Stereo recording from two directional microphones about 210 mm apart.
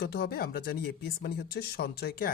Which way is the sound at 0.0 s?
50° left (ahead or behind).